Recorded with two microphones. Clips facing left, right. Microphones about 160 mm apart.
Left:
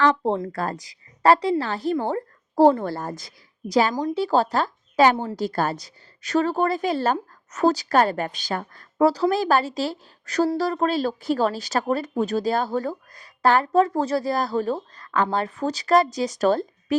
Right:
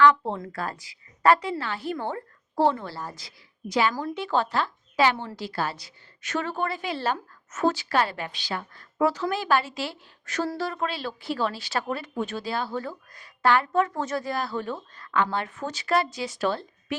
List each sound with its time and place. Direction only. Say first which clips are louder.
0.0 s speech: even; 35° left (ahead or behind)